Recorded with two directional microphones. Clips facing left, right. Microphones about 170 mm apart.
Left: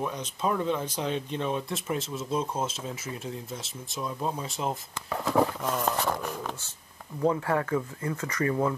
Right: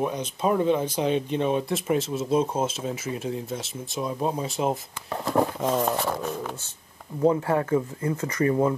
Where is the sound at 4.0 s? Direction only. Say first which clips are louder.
Right 5 dB; 20° right (ahead or behind).